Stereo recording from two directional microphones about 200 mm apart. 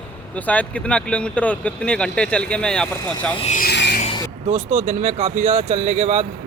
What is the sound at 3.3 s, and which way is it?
Speech, 30° left (ahead or behind).